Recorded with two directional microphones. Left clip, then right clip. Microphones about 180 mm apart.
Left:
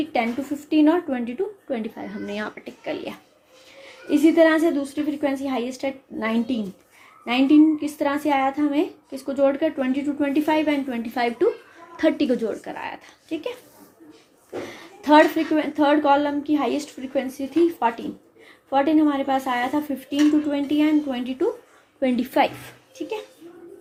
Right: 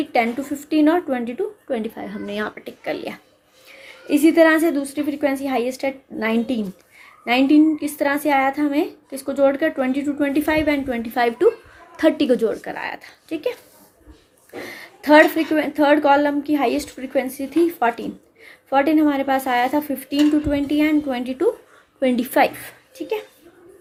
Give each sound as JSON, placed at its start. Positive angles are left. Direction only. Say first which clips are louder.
{"t": 0.0, "sound": "a woman's voice", "louder": "right 4 dB", "side_deg": -40}
{"t": 14.7, "sound": "a woman's voice", "louder": "right 3 dB", "side_deg": -45}